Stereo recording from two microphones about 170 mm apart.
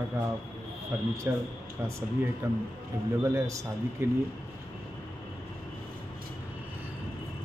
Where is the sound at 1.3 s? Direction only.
15° right (ahead or behind).